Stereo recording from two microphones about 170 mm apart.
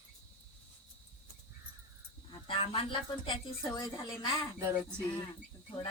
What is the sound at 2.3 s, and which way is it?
Speech, 30° left (ahead or behind).